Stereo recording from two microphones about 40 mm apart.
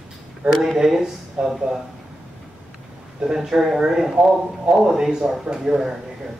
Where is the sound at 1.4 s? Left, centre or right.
Right.